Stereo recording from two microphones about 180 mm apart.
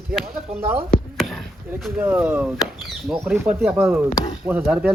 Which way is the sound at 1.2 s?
Centre (ahead or behind).